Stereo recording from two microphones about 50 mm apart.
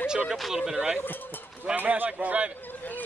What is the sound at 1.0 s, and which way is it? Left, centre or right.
Speech, left.